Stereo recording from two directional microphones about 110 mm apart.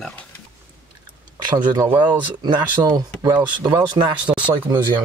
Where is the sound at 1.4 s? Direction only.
35° right (ahead or behind).